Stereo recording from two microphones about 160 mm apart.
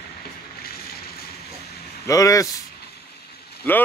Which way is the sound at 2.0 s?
20° left (ahead or behind).